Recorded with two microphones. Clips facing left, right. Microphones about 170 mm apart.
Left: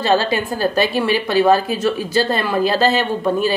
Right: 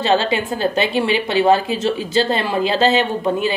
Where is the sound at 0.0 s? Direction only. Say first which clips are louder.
Even; 20° right (ahead or behind).